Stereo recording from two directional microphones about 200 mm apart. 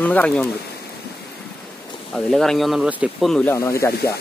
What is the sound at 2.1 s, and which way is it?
Speech, centre (ahead or behind).